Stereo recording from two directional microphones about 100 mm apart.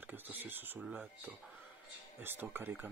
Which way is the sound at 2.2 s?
20° right (ahead or behind).